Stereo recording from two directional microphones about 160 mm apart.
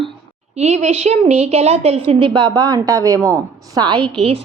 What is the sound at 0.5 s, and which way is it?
A woman's voice, 45° right (ahead or behind).